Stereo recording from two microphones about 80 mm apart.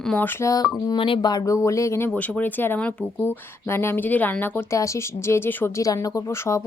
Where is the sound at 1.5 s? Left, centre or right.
Left.